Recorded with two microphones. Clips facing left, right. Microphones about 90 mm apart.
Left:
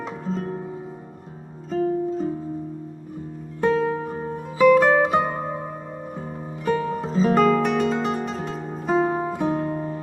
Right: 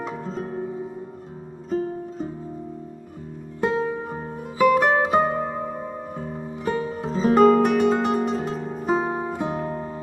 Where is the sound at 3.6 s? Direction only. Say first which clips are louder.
Left 3 dB; 5° right (ahead or behind).